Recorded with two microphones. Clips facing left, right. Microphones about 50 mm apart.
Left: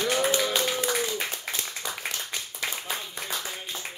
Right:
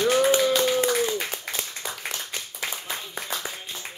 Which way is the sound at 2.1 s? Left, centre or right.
Centre.